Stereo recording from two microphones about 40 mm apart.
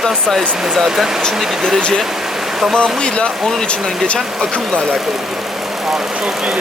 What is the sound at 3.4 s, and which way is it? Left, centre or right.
Speech, centre.